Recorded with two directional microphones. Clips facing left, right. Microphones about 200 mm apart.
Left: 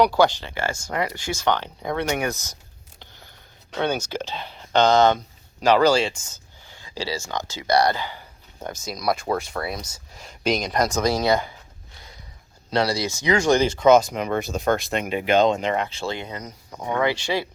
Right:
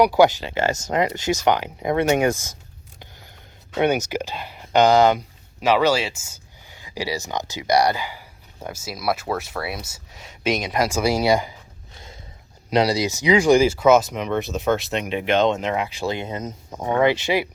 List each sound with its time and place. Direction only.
0.0 s speech: 15° right (ahead or behind)
3.8 s speech: 15° right (ahead or behind)
12.7 s speech: 15° right (ahead or behind)
15.9 s speech: 15° right (ahead or behind)